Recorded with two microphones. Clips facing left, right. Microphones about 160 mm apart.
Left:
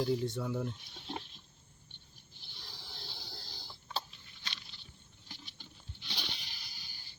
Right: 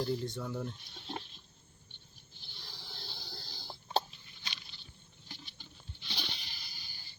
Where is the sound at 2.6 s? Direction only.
15° left (ahead or behind).